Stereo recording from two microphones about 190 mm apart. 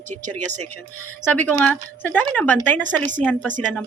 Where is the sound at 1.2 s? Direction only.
10° left (ahead or behind).